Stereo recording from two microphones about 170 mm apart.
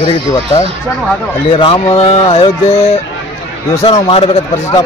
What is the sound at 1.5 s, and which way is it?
Speech, 30° left (ahead or behind).